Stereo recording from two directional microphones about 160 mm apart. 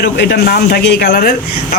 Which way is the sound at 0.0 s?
90° left.